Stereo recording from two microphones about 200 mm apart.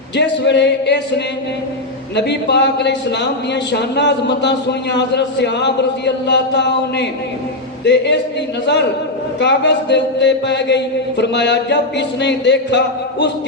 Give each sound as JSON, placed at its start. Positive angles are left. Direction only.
{"t": 0.2, "sound": "a man's voice", "side_deg": 60}
{"t": 2.1, "sound": "a man's voice", "side_deg": 60}
{"t": 9.4, "sound": "a man's voice", "side_deg": 60}